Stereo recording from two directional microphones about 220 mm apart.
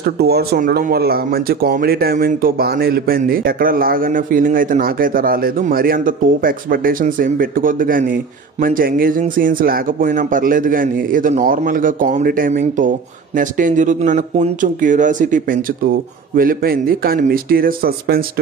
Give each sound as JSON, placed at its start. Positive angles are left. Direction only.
{"t": 0.0, "sound": "speech", "side_deg": -45}